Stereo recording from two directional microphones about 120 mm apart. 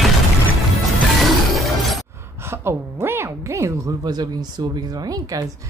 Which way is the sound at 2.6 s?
20° right (ahead or behind).